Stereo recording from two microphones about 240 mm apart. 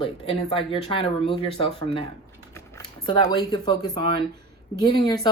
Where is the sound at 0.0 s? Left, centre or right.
Left.